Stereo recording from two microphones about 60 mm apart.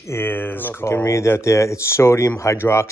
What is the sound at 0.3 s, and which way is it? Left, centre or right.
Speech, left.